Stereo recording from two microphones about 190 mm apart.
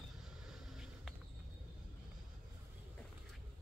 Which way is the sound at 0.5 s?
5° right (ahead or behind).